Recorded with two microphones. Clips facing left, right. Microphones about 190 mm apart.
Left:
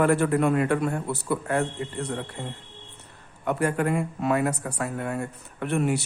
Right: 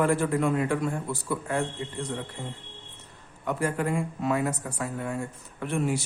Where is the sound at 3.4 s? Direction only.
65° left (ahead or behind).